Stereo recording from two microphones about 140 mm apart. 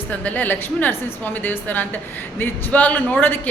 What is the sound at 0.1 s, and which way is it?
A woman's voice, 10° left (ahead or behind).